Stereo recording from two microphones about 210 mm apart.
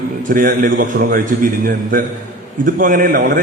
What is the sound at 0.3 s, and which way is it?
A man's voice, 40° right (ahead or behind).